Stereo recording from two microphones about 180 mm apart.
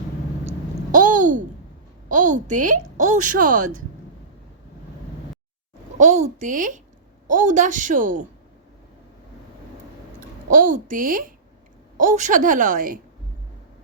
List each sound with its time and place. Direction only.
0.9 s a sound: 45° right (ahead or behind)
2.0 s a woman's voice: 45° right (ahead or behind)
6.0 s a woman's voice: 40° right (ahead or behind)
10.5 s a woman's voice: 50° right (ahead or behind)